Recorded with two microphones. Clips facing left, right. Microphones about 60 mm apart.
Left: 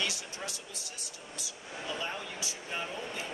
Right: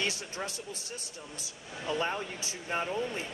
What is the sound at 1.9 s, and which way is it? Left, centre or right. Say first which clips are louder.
Speech: right 6 dB; right.